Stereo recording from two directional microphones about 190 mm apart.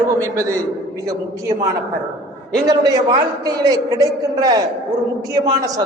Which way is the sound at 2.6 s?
20° right (ahead or behind).